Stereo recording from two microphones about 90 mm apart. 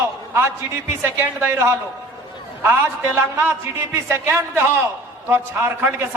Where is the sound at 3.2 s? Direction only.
25° right (ahead or behind).